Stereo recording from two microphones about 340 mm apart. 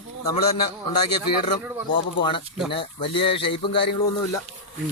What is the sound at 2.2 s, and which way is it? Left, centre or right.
Speech, centre.